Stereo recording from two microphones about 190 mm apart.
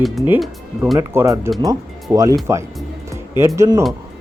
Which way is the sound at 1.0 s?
15° right (ahead or behind).